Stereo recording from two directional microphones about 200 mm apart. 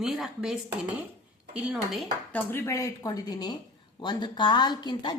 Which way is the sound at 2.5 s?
15° left (ahead or behind).